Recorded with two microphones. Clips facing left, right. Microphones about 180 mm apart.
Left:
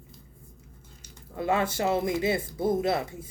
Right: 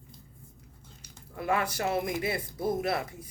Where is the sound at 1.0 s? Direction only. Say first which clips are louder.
Left 4 dB; 25° left (ahead or behind).